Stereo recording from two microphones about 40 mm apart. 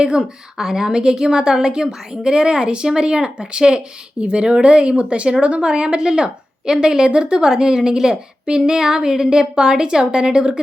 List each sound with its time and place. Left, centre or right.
0.0 s a woman's voice: centre